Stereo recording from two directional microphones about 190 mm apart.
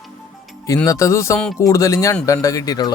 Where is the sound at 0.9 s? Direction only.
15° left (ahead or behind).